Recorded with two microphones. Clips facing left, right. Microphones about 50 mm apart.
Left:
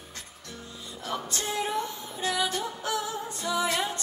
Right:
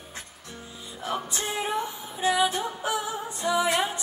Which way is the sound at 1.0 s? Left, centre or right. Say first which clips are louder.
Right 2 dB; centre.